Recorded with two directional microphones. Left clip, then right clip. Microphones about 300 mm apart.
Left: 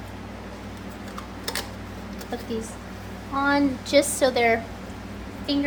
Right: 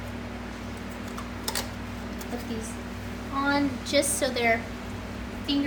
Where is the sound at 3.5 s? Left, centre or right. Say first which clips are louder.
Left 4 dB; centre.